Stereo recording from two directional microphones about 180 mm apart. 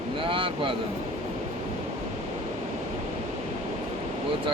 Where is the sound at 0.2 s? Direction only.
30° right (ahead or behind).